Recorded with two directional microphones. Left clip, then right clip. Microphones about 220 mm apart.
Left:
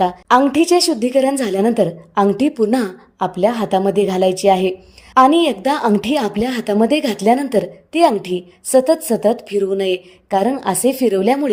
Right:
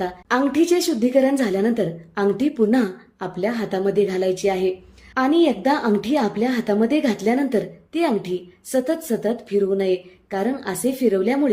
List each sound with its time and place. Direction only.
0.0 s a woman's voice: 30° left (ahead or behind)